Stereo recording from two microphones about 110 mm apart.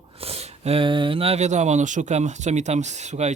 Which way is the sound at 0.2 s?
65° right (ahead or behind).